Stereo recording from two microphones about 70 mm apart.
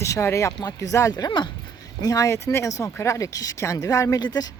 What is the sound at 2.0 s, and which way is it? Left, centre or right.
Speech, left.